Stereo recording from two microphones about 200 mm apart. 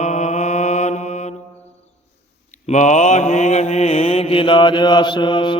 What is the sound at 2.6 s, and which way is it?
Mantra, 35° left (ahead or behind).